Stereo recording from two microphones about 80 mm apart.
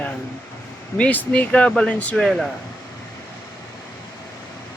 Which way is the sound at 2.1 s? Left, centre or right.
Centre.